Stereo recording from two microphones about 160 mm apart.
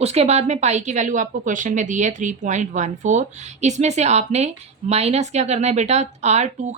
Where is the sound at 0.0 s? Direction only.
40° right (ahead or behind).